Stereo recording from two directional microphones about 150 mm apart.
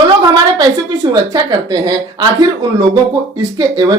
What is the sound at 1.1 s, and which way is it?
Speech, 25° right (ahead or behind).